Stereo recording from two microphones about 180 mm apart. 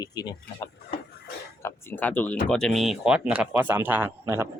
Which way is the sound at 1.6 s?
10° left (ahead or behind).